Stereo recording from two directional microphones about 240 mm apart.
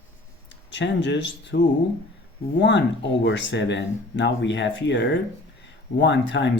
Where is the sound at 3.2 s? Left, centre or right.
Left.